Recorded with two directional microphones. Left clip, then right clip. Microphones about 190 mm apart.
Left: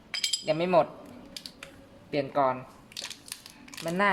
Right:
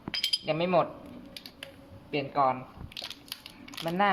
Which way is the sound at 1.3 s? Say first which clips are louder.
Left 2 dB; 5° right (ahead or behind).